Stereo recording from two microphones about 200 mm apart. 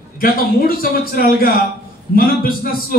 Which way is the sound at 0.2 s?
45° left (ahead or behind).